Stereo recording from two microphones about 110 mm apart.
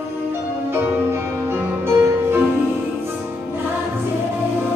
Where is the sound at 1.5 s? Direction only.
20° right (ahead or behind).